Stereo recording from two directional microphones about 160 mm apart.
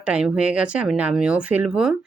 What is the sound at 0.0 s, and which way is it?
Speech, 5° right (ahead or behind).